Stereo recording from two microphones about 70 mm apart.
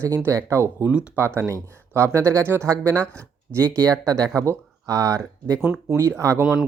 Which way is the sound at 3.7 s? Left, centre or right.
Right.